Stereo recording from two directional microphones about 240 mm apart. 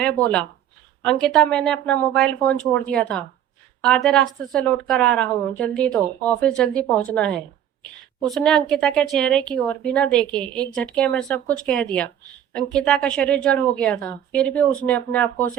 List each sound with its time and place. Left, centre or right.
1.3 s a woman's voice: centre